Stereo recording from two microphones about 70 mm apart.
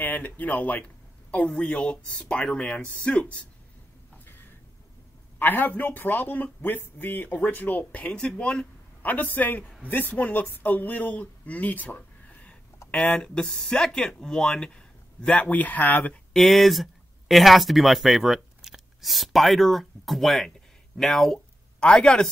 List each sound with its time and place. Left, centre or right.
0.0 s speech: left
5.4 s speech: left
16.3 s speech: centre